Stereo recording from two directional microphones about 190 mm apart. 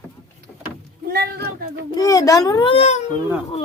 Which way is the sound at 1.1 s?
55° right (ahead or behind).